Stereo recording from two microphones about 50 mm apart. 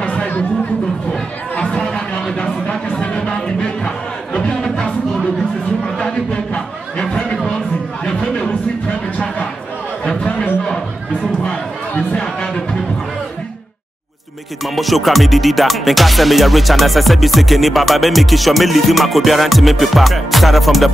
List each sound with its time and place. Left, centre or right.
0.0 s chatter: left
1.8 s chatter: centre
2.3 s a sound: left
3.8 s crowd: centre
6.5 s a sound: centre
12.1 s music: centre
14.8 s music: centre